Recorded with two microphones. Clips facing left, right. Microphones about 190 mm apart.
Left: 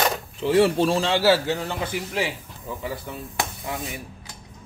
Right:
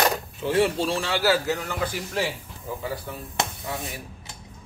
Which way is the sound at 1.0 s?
30° left (ahead or behind).